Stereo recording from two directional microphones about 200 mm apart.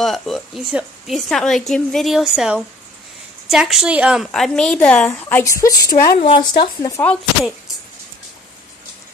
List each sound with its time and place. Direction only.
0.0 s speech: centre (ahead or behind); by 6.1 s 20° left (ahead or behind)
6.1 s speech: 30° left (ahead or behind)
6.6 s speech: 15° left (ahead or behind)